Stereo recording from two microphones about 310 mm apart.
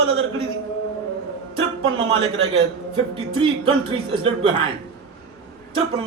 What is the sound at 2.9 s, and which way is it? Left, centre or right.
A man's voice, centre.